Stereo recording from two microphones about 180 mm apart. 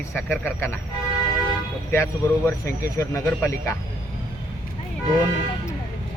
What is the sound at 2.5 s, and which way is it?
Speech, 15° left (ahead or behind).